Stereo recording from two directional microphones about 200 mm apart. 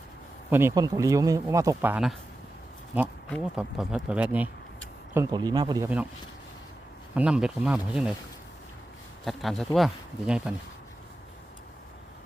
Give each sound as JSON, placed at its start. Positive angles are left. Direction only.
{"t": 0.5, "sound": "speech", "side_deg": -15}
{"t": 3.2, "sound": "speech", "side_deg": 0}
{"t": 5.1, "sound": "speech", "side_deg": -15}
{"t": 7.2, "sound": "speech", "side_deg": -5}
{"t": 9.2, "sound": "speech", "side_deg": 0}